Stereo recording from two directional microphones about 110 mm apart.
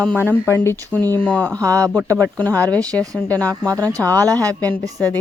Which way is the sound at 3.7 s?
30° right (ahead or behind).